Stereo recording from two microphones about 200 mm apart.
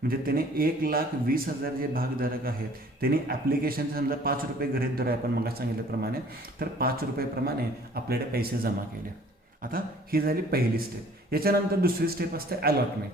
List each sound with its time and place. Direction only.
0.1 s a man's voice: 45° right (ahead or behind)
9.7 s a man's voice: 50° right (ahead or behind)